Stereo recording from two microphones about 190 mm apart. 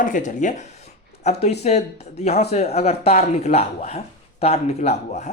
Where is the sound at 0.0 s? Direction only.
45° left (ahead or behind).